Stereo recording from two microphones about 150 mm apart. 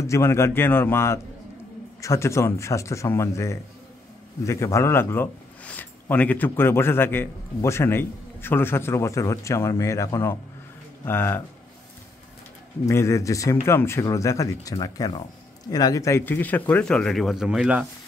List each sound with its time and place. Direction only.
0.0 s speech: 20° left (ahead or behind)
12.8 s speech: 20° left (ahead or behind); by 17.8 s 5° right (ahead or behind)